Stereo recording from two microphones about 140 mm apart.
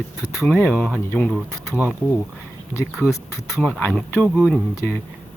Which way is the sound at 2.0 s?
10° left (ahead or behind).